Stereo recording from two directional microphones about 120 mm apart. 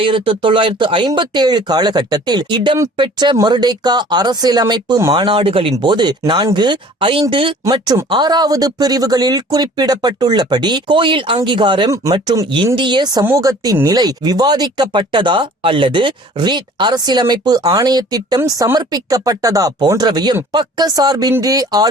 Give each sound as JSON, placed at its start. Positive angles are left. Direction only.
{"t": 0.0, "sound": "speech", "side_deg": -45}